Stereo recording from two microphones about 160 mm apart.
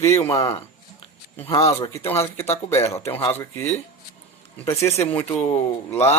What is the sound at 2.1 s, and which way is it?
Speech, 15° left (ahead or behind).